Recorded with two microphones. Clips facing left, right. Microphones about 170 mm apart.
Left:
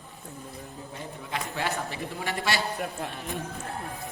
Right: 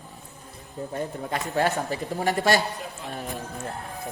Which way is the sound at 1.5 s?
40° right (ahead or behind).